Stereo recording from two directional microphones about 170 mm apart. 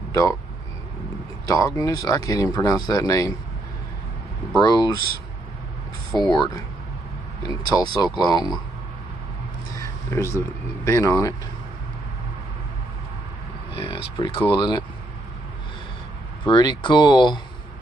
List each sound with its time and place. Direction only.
1.5 s speech: 20° left (ahead or behind)
4.6 s speech: 20° left (ahead or behind)
6.1 s speech: 20° left (ahead or behind)
9.8 s a sound: 15° left (ahead or behind)
10.9 s speech: 15° left (ahead or behind)
13.7 s speech: 30° left (ahead or behind)
16.4 s speech: 25° left (ahead or behind)